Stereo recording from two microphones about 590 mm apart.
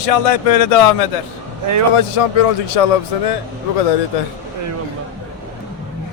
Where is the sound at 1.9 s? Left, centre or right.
Left.